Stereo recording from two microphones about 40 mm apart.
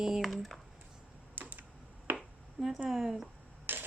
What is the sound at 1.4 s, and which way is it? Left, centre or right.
Computer keyboard, right.